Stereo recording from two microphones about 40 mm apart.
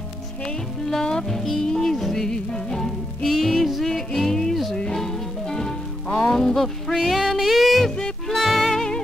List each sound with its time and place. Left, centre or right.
0.8 s music: centre
8.7 s music: centre